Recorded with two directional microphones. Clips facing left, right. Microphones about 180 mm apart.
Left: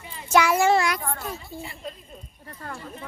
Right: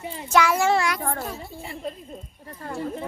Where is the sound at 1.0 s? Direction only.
50° right (ahead or behind).